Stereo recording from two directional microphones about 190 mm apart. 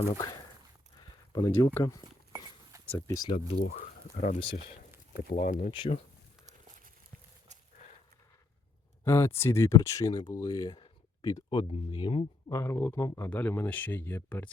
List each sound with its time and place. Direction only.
0.1 s speech: 20° left (ahead or behind)
2.0 s a sound: 15° right (ahead or behind)
2.8 s speech: 15° left (ahead or behind)
3.3 s speech: 30° left (ahead or behind)
3.8 s speech: 40° left (ahead or behind)
5.7 s speech: 25° left (ahead or behind)
9.0 s speech: 15° left (ahead or behind)
12.5 s speech: 15° left (ahead or behind)